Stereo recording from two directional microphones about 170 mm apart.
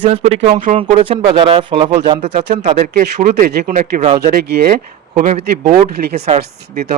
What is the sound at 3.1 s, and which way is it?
Speech, 65° right (ahead or behind).